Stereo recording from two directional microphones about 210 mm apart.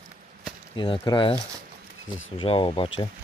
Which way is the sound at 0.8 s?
20° left (ahead or behind).